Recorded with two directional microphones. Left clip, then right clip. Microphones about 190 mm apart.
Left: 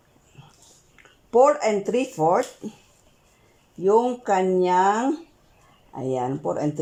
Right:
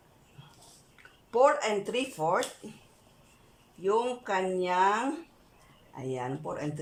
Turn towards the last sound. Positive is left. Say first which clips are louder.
# left 10 dB
turn(degrees=30)  # may be behind; listen again after turning